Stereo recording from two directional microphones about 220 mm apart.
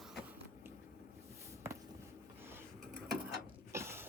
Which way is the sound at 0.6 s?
10° right (ahead or behind).